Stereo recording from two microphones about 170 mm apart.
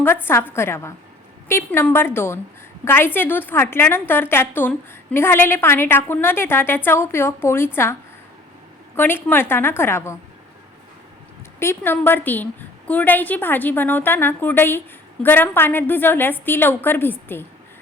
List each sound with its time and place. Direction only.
0.0 s a woman's voice: 15° left (ahead or behind)
9.0 s a woman's voice: 10° left (ahead or behind)
11.6 s a woman's voice: 15° left (ahead or behind)